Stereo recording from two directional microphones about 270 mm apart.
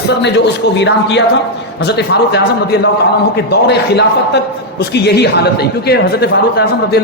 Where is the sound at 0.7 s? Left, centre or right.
Left.